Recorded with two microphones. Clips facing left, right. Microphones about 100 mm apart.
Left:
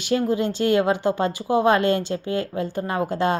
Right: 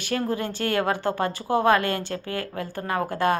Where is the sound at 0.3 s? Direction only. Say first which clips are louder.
Left 6 dB; 20° left (ahead or behind).